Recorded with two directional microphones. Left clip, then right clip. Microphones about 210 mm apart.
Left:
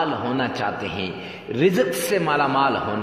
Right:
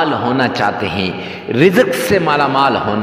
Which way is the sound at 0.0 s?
30° right (ahead or behind).